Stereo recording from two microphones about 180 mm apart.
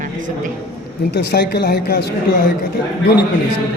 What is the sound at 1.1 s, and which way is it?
Speech, 65° left (ahead or behind).